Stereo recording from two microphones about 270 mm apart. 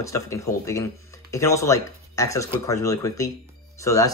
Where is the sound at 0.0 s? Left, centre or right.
Centre.